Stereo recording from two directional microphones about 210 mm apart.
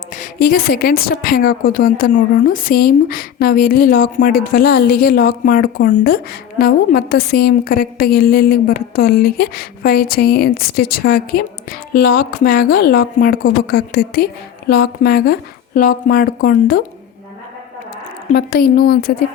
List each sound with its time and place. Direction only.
0.2 s a woman's voice: 45° left (ahead or behind)
18.3 s a woman's voice: 45° left (ahead or behind)